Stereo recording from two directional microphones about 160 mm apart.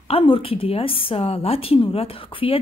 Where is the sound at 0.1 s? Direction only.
35° left (ahead or behind).